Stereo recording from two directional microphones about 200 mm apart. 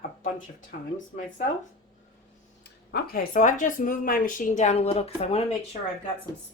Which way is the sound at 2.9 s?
45° left (ahead or behind).